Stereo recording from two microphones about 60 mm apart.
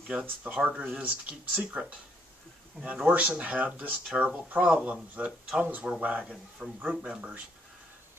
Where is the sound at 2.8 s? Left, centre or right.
Right.